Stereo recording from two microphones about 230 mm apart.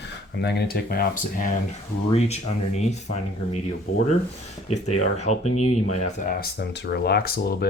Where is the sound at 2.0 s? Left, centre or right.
Left.